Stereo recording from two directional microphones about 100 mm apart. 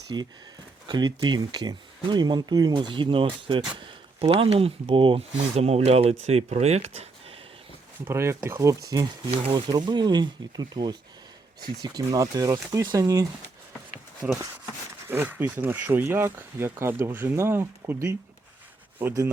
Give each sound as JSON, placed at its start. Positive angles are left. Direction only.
{"t": 0.1, "sound": "speech", "side_deg": -45}
{"t": 8.0, "sound": "speech", "side_deg": -25}
{"t": 9.5, "sound": "speech", "side_deg": -45}
{"t": 14.2, "sound": "speech", "side_deg": -15}